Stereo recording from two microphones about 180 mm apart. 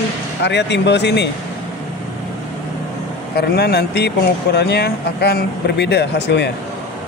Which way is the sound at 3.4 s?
65° left (ahead or behind).